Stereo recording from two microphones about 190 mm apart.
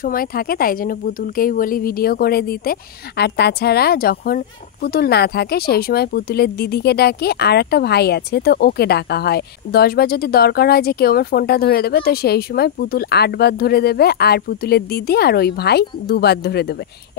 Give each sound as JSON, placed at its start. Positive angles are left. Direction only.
{"t": 0.0, "sound": "speech", "side_deg": 50}